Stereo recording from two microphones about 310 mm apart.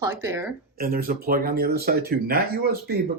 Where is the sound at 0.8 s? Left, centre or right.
Right.